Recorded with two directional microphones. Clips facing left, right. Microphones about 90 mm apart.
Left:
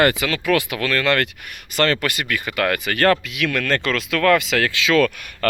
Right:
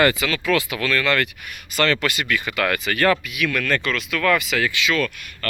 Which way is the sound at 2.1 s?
40° left (ahead or behind).